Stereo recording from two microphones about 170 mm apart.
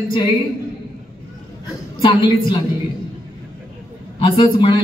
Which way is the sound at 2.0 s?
30° left (ahead or behind).